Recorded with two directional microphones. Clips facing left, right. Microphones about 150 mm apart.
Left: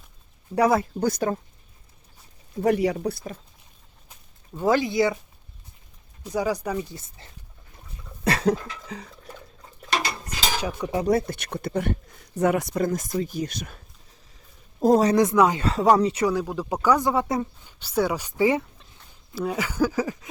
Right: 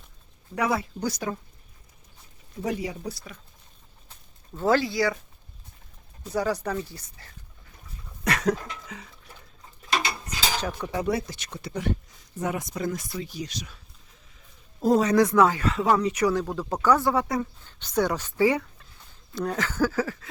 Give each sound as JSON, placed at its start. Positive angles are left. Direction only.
{"t": 0.5, "sound": "speech", "side_deg": 40}
{"t": 2.6, "sound": "speech", "side_deg": 65}
{"t": 4.5, "sound": "speech", "side_deg": 15}
{"t": 6.2, "sound": "speech", "side_deg": 10}
{"t": 8.2, "sound": "a sound", "side_deg": 30}
{"t": 10.6, "sound": "speech", "side_deg": 10}
{"t": 11.0, "sound": "speech", "side_deg": 50}
{"t": 14.8, "sound": "speech", "side_deg": 40}
{"t": 15.1, "sound": "speech", "side_deg": 20}
{"t": 15.6, "sound": "speech", "side_deg": 35}
{"t": 16.3, "sound": "speech", "side_deg": 10}
{"t": 17.6, "sound": "speech", "side_deg": 10}
{"t": 19.3, "sound": "speech", "side_deg": 10}